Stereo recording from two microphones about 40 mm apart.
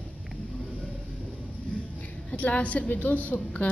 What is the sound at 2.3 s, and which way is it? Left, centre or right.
A woman's voice, left.